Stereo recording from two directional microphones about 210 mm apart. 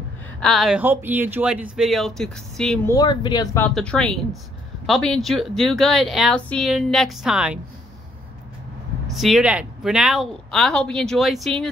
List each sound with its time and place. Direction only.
0.4 s a woman's voice: centre (ahead or behind)
2.9 s speech: 20° left (ahead or behind)
3.6 s a woman's voice: 5° left (ahead or behind)
9.1 s a woman's voice: centre (ahead or behind)